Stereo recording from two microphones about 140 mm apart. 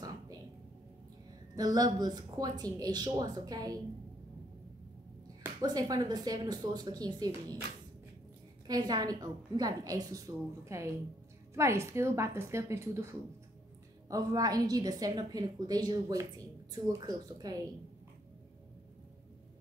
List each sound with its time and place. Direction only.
1.5 s a woman's voice: 25° right (ahead or behind)
5.6 s a woman's voice: 25° right (ahead or behind)
8.6 s a woman's voice: 30° right (ahead or behind)